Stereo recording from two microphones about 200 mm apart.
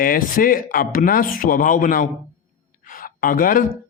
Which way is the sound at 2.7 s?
45° left (ahead or behind).